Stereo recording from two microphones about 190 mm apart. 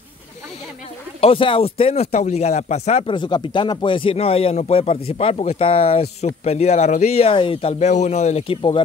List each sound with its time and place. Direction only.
1.2 s speech: 30° left (ahead or behind)